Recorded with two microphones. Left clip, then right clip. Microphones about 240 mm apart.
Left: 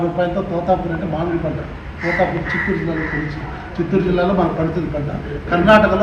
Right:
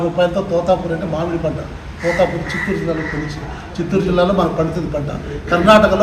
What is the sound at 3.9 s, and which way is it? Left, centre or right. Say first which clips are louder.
Speech: right 2 dB; centre.